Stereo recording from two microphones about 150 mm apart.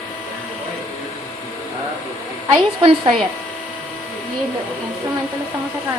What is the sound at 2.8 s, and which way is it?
Speech, 40° right (ahead or behind).